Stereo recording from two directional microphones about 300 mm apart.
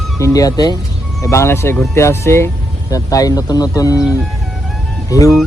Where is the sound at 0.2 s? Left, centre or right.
Centre.